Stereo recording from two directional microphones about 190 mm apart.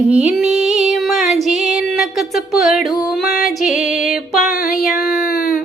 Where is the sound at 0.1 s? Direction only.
Centre (ahead or behind).